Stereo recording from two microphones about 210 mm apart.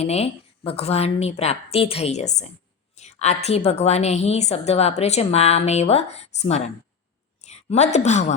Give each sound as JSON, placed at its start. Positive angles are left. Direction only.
{"t": 0.0, "sound": "a woman's voice", "side_deg": 30}